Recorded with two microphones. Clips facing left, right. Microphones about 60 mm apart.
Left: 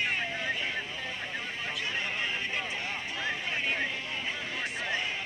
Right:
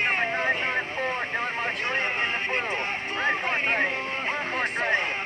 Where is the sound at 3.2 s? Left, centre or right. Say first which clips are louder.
Right 8 dB; right.